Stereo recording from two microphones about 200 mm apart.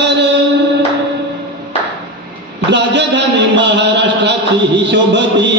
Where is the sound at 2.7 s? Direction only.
60° right (ahead or behind).